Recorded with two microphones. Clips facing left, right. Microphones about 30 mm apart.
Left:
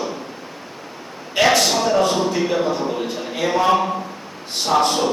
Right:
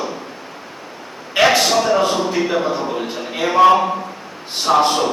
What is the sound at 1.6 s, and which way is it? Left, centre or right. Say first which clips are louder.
A man's voice: right 2 dB; centre.